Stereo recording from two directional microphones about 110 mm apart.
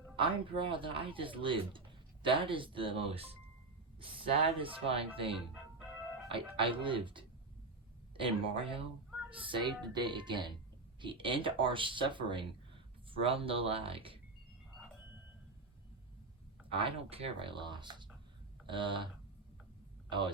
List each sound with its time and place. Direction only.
0.2 s speech: 50° right (ahead or behind)
16.7 s speech: 55° right (ahead or behind)